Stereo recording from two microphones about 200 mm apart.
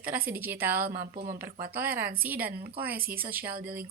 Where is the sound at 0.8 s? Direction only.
45° right (ahead or behind).